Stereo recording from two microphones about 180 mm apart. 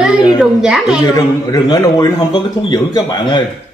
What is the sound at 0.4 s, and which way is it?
Speech, 5° right (ahead or behind).